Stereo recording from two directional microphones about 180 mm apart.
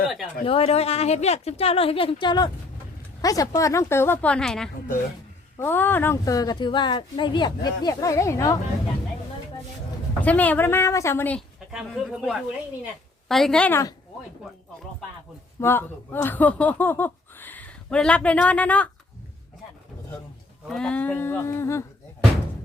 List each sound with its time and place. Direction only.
0.4 s a woman's voice: 30° left (ahead or behind)
10.2 s speech: 10° left (ahead or behind)
11.7 s speech: 5° right (ahead or behind); by 13.9 s 10° left (ahead or behind)
15.6 s speech: 10° left (ahead or behind)
20.7 s speech: 5° left (ahead or behind)